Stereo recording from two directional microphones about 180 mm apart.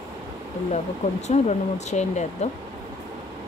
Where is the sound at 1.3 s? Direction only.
40° left (ahead or behind).